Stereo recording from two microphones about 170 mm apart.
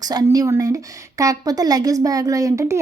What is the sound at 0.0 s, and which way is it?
A woman's voice, 20° right (ahead or behind).